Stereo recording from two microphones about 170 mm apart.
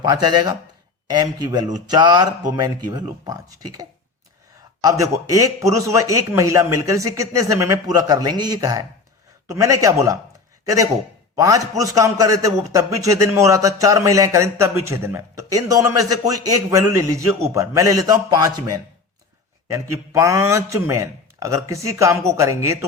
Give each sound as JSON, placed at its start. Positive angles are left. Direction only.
{"t": 0.0, "sound": "a man's voice", "side_deg": -25}
{"t": 11.3, "sound": "a man's voice", "side_deg": -20}